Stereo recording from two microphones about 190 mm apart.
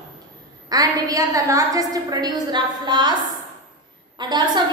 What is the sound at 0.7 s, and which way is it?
A woman's voice, 20° right (ahead or behind).